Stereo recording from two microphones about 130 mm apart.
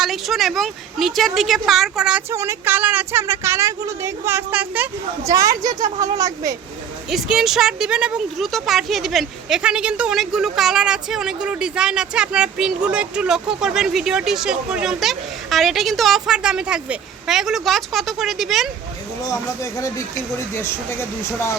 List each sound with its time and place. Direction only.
0.0 s speech: centre (ahead or behind)
2.3 s speech: 20° right (ahead or behind)
5.2 s speech: 25° right (ahead or behind)
7.1 s speech: 5° right (ahead or behind)
20.5 s speech: 20° left (ahead or behind)